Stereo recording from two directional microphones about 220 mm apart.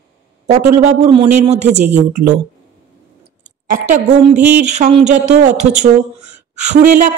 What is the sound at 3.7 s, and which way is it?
Speech, 35° right (ahead or behind).